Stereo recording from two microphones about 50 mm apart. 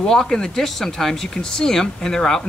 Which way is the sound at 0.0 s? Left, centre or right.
Centre.